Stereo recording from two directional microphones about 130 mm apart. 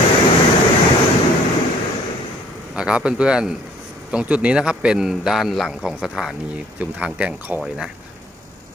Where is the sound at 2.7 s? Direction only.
5° right (ahead or behind).